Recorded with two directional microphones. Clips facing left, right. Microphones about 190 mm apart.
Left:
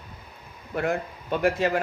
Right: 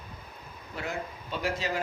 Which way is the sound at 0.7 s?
55° left (ahead or behind).